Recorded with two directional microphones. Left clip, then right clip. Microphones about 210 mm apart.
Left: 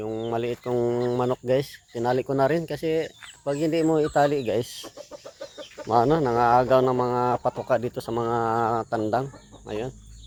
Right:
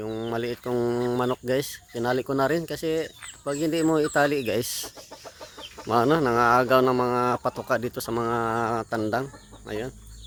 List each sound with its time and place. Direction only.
0.0 s speech: 15° right (ahead or behind)
5.9 s speech: 15° right (ahead or behind)